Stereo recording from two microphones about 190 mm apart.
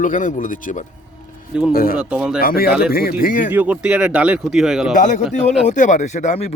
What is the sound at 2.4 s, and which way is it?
Speech, 50° left (ahead or behind).